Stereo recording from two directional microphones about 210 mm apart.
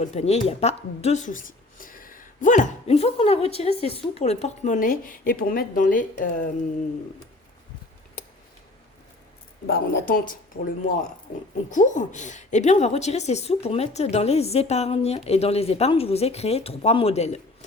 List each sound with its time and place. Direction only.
0.0 s a woman's voice: 30° left (ahead or behind)
9.6 s speech: 50° left (ahead or behind)
11.7 s a woman's voice: 35° left (ahead or behind)